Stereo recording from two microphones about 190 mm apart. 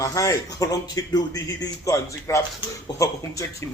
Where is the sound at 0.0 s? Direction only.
15° left (ahead or behind).